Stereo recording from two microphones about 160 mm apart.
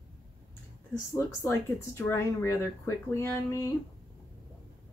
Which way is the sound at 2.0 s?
15° left (ahead or behind).